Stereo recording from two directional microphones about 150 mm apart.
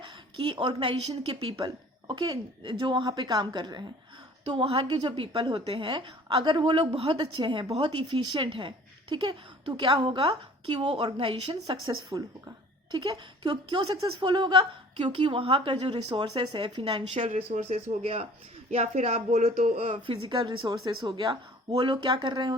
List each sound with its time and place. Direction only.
0.4 s a woman's voice: 35° right (ahead or behind)
4.4 s a woman's voice: 40° right (ahead or behind)
13.9 s a woman's voice: 25° right (ahead or behind)
17.0 s speech: 50° right (ahead or behind)
18.0 s speech: 40° right (ahead or behind)
20.1 s a woman's voice: 35° right (ahead or behind)